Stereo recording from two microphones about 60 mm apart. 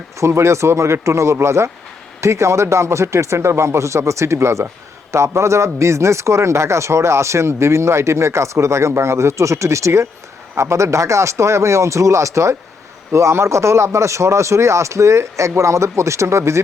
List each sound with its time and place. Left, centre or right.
0.2 s speech: right